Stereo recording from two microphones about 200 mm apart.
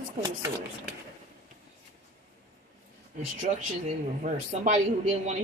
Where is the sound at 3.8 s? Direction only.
40° right (ahead or behind).